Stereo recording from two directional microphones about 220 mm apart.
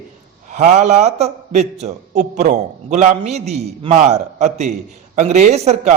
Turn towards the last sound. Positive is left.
turn(degrees=-30)  # may be behind; listen again after turning